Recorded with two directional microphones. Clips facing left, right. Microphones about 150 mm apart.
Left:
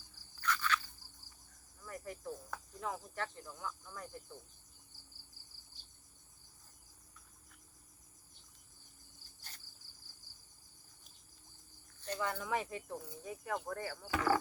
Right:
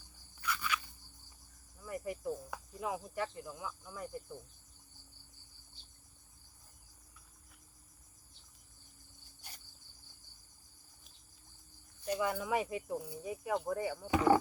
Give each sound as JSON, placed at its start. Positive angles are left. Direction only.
{"t": 0.4, "sound": "insect", "side_deg": -10}
{"t": 1.8, "sound": "cricket", "side_deg": -10}
{"t": 11.9, "sound": "speech", "side_deg": -10}